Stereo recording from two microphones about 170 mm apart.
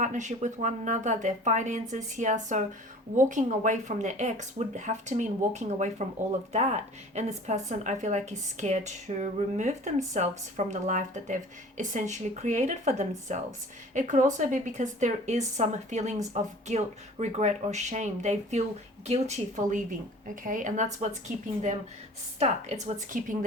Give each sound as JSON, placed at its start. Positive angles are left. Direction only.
{"t": 0.0, "sound": "a woman's voice", "side_deg": -45}